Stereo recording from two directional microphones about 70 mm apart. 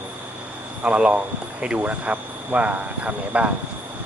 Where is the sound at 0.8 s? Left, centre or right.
Centre.